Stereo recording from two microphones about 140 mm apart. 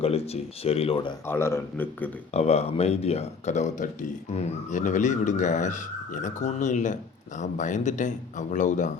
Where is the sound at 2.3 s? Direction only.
50° left (ahead or behind).